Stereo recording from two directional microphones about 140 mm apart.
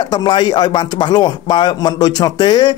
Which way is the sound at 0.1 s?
30° left (ahead or behind).